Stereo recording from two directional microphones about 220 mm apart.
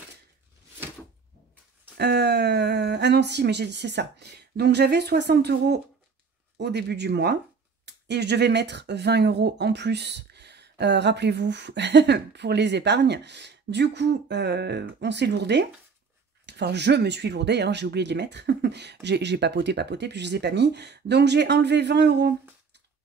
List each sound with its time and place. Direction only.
2.0 s speech: 50° right (ahead or behind)